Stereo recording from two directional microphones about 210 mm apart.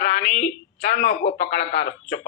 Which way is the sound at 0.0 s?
50° left (ahead or behind).